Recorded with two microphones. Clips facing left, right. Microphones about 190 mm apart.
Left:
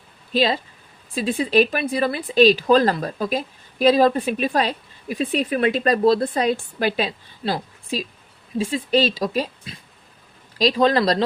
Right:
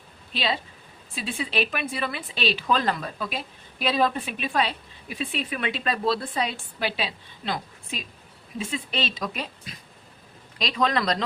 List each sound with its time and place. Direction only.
0.3 s speech: 40° left (ahead or behind)